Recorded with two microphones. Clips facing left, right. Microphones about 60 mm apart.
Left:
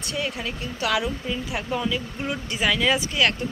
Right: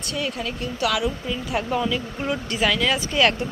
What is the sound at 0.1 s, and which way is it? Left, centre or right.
Speech, centre.